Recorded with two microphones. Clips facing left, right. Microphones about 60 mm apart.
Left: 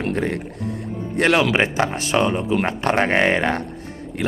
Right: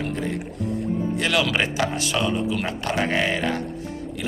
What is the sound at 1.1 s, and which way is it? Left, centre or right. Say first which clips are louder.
Music: left 8 dB; left.